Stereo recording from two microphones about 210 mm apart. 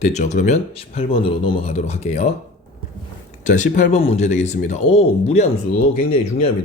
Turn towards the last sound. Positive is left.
turn(degrees=30)  # may be behind; listen again after turning